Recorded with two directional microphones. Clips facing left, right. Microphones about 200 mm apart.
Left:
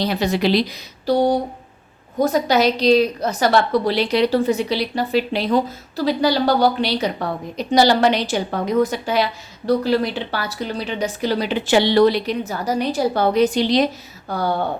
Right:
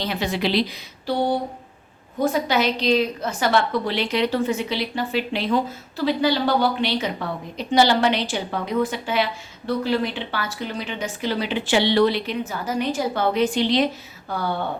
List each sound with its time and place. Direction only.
0.0 s a woman's voice: 40° left (ahead or behind)